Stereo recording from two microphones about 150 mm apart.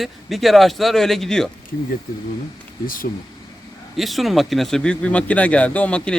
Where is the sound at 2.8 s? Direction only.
70° left (ahead or behind).